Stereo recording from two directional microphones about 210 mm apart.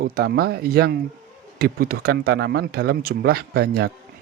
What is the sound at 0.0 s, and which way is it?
Speech, 50° right (ahead or behind).